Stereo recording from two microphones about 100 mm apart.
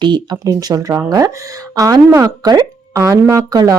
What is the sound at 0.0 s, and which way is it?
Speech, 50° right (ahead or behind).